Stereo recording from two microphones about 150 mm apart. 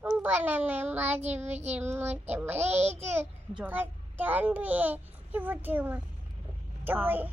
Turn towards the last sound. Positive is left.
turn(degrees=-15)  # may be behind; listen again after turning